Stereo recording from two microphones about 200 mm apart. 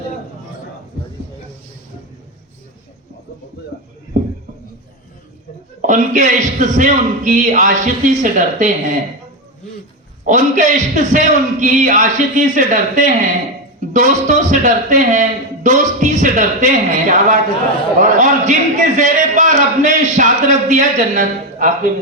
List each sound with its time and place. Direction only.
5.8 s a man's voice: 40° right (ahead or behind)
10.2 s a man's voice: 40° right (ahead or behind)